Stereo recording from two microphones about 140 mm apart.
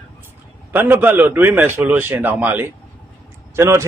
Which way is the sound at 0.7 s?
15° right (ahead or behind).